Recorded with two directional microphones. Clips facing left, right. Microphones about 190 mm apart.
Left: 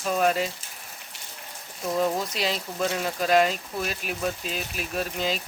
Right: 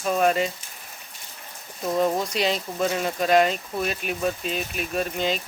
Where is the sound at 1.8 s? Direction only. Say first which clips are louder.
Right 2 dB; 5° right (ahead or behind).